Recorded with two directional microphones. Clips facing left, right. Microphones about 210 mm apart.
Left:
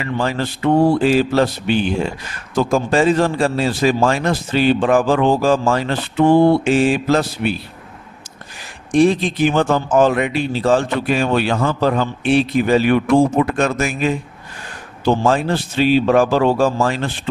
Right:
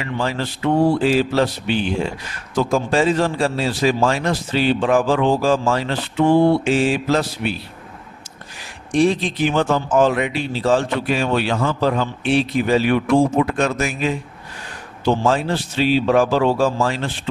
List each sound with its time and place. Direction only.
0.0 s a man's voice: 50° left (ahead or behind)
8.9 s a man's voice: 50° left (ahead or behind)